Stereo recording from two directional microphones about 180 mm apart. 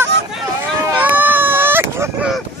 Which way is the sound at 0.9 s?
10° right (ahead or behind).